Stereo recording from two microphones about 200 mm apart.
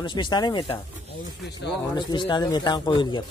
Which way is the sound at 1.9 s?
25° left (ahead or behind).